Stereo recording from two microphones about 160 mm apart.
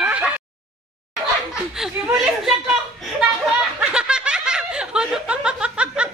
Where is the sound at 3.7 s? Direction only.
5° right (ahead or behind).